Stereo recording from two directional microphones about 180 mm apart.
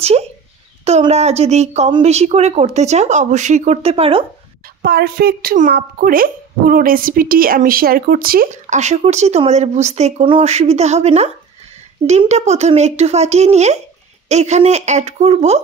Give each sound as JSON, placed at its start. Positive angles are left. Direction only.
{"t": 0.8, "sound": "speech", "side_deg": -35}
{"t": 4.8, "sound": "speech", "side_deg": -60}